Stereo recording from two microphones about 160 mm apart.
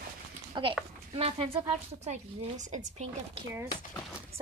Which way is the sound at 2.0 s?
45° right (ahead or behind).